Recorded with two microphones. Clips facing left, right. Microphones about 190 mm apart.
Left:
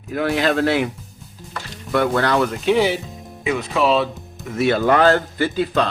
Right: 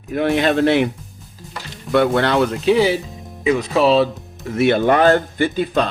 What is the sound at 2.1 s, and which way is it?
Speech, 30° right (ahead or behind).